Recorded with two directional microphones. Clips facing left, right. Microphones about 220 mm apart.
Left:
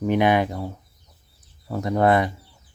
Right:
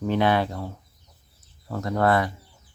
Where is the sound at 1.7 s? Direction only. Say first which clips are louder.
Left 3 dB; 15° left (ahead or behind).